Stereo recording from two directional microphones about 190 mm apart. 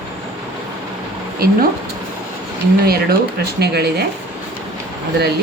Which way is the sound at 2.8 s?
55° right (ahead or behind).